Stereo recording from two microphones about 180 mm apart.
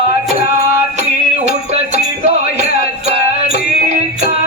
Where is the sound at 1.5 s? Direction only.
40° right (ahead or behind).